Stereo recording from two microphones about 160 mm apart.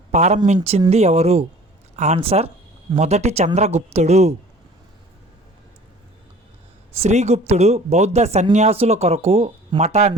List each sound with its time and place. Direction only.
0.1 s speech: 45° right (ahead or behind)
7.0 s speech: 45° right (ahead or behind)